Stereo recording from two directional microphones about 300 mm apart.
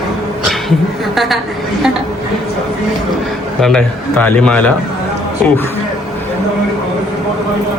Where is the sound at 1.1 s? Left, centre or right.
Centre.